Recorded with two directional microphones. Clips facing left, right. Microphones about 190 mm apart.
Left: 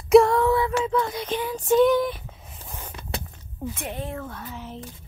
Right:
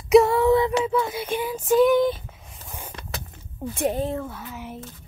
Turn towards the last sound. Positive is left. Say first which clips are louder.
# right 1 dB
turn(degrees=-5)  # may be behind; listen again after turning